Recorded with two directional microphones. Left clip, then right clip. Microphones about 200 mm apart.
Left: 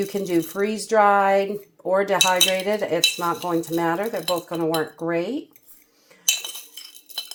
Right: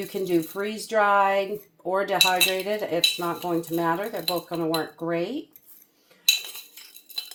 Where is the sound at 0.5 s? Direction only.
40° left (ahead or behind).